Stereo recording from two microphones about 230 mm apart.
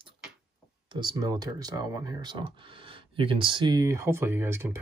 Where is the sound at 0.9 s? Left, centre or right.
Centre.